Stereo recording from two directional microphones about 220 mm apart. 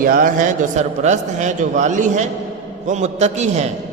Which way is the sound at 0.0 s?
40° right (ahead or behind).